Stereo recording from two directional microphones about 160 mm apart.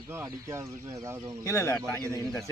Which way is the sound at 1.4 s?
20° left (ahead or behind).